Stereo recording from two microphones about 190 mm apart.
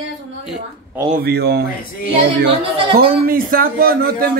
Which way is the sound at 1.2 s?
55° right (ahead or behind).